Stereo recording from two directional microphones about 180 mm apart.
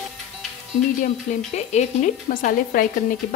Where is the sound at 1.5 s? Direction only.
40° left (ahead or behind).